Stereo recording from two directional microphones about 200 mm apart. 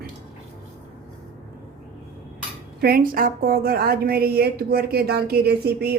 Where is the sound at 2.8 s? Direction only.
45° right (ahead or behind).